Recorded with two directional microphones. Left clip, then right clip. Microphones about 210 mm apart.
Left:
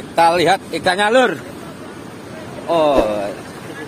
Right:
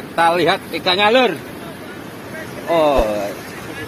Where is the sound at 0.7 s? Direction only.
35° left (ahead or behind).